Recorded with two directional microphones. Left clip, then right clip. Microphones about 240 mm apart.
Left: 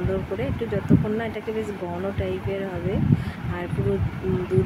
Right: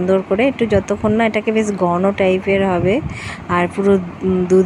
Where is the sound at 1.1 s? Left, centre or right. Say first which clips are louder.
Right 12 dB; right.